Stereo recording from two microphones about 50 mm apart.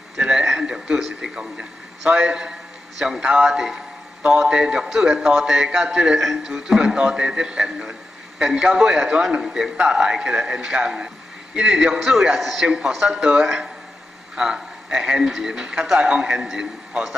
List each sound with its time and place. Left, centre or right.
0.2 s a man's voice: centre
6.5 s speech: centre
12.6 s speech: centre